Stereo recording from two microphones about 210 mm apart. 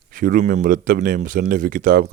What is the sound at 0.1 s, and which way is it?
Speech, 40° right (ahead or behind).